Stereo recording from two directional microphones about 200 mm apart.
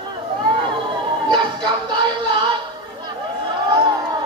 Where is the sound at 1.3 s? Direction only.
20° right (ahead or behind).